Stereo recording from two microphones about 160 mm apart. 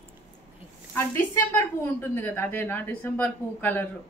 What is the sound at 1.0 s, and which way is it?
A woman's voice, 15° left (ahead or behind).